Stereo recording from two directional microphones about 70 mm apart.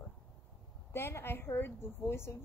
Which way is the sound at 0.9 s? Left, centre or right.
Left.